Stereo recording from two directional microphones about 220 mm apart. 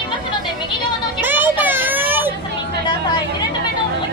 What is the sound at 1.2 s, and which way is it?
Children playing, 10° right (ahead or behind).